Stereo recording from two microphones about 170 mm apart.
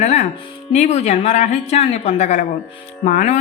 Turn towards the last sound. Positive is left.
turn(degrees=45)  # may be behind; listen again after turning